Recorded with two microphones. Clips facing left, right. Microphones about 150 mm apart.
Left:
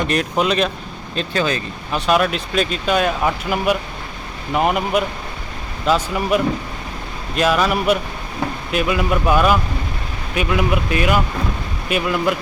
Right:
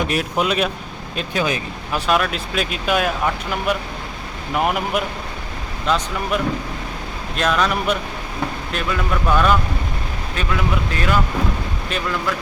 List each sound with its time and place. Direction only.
0.1 s speech: 5° right (ahead or behind)
2.0 s speech: centre (ahead or behind)
3.2 s speech: 5° left (ahead or behind)